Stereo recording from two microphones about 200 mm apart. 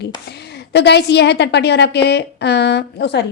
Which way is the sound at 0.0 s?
55° left (ahead or behind).